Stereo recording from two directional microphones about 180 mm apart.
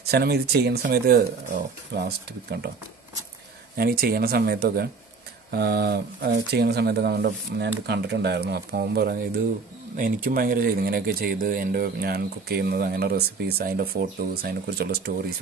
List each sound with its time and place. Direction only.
0.0 s speech: 60° right (ahead or behind)
3.7 s speech: 55° right (ahead or behind)